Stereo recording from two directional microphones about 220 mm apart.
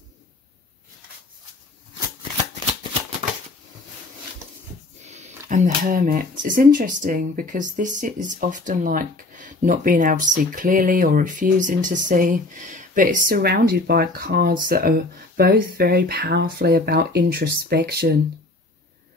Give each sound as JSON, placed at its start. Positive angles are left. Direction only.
{"t": 5.0, "sound": "speech", "side_deg": -30}